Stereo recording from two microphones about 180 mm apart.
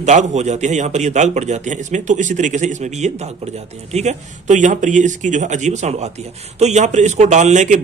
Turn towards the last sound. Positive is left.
turn(degrees=-40)  # may be behind; listen again after turning